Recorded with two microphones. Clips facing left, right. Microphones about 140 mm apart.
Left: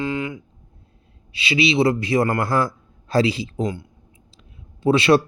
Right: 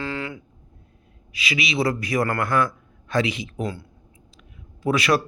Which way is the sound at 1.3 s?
30° left (ahead or behind).